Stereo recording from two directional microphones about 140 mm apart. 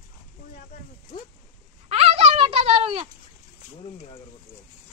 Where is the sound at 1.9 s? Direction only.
50° right (ahead or behind).